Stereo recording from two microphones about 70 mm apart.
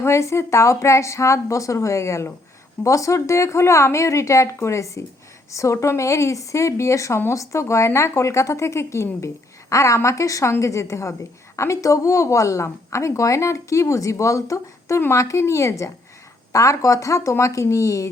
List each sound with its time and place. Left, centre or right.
0.0 s a woman's voice: left